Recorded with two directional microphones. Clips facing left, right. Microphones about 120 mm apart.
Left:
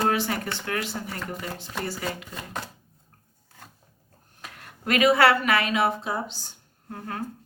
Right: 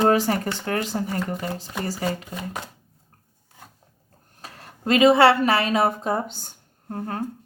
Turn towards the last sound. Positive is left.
turn(degrees=-35)  # may be behind; listen again after turning